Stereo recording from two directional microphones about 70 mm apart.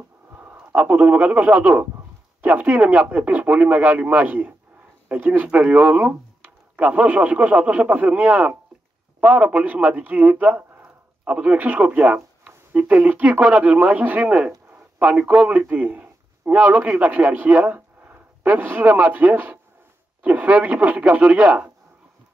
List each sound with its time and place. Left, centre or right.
0.3 s a man's voice: right
5.5 s speech: centre
15.7 s a sound: right
16.6 s speech: centre
17.7 s a sound: right
18.9 s speech: centre